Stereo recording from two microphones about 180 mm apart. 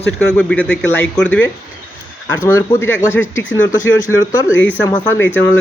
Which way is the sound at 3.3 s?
90° left.